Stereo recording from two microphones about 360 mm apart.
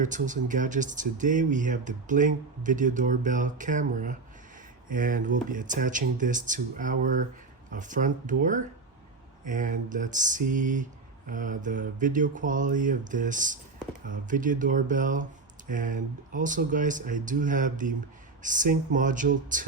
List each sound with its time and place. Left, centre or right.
0.0 s speech: right